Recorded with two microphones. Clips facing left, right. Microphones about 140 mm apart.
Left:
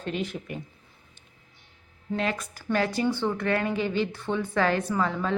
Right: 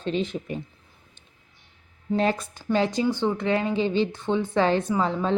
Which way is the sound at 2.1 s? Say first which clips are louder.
Right 5 dB; 30° right (ahead or behind).